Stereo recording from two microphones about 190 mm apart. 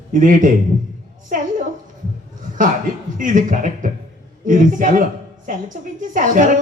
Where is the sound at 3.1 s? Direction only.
45° right (ahead or behind).